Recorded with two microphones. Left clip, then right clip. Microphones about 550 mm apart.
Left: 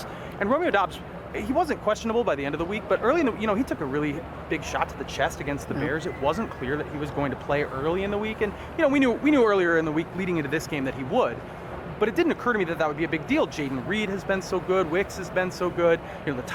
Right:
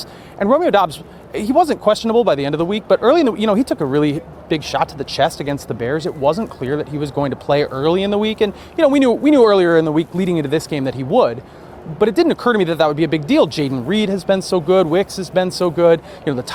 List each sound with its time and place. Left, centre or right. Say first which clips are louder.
0.3 s speech: right 9 dB; right